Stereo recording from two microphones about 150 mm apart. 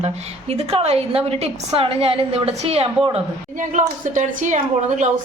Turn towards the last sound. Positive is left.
turn(degrees=-55)  # may be behind; listen again after turning